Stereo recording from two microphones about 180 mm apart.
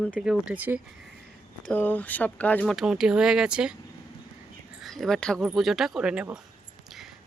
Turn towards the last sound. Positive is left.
turn(degrees=0)  # may be behind; listen again after turning